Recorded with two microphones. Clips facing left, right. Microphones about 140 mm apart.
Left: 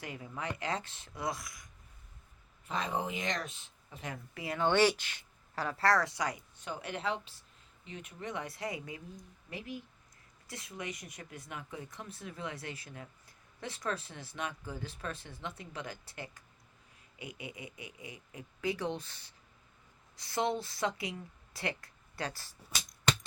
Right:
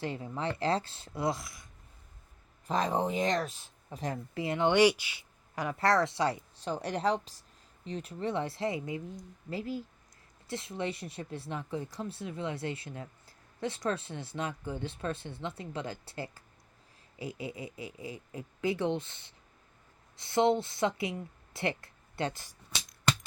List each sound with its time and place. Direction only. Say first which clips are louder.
0.0 s speech: right 6 dB; 30° right (ahead or behind)
2.6 s a woman's voice: right 6 dB; 40° right (ahead or behind); by 22.5 s 20° right (ahead or behind)